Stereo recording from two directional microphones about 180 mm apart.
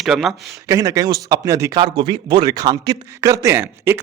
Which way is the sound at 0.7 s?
20° right (ahead or behind).